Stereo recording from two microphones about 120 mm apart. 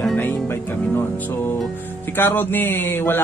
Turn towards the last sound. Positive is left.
turn(degrees=20)  # may be behind; listen again after turning